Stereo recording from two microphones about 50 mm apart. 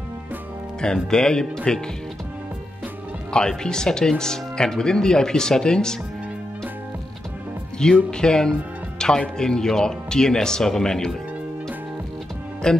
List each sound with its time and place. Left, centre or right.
1.1 s speech: centre
3.3 s speech: centre
7.8 s speech: centre
12.6 s speech: centre